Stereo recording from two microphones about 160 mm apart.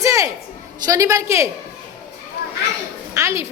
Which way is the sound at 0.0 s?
20° right (ahead or behind).